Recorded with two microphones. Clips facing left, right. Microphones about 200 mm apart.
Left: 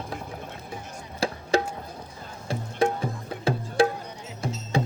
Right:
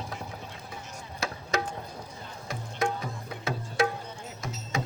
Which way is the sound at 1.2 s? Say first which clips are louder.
Left 6 dB; 30° left (ahead or behind).